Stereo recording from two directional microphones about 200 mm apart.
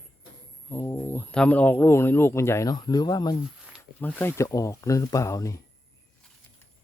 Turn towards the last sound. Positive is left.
turn(degrees=15)  # may be behind; listen again after turning